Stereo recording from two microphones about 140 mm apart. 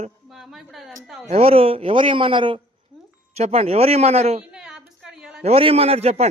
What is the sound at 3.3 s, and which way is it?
A man's voice, 50° right (ahead or behind).